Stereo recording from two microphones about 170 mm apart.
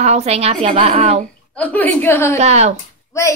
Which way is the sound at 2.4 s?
40° right (ahead or behind).